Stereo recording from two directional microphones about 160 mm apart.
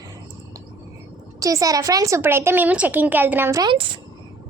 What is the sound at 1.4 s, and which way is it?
A woman's voice, 20° right (ahead or behind).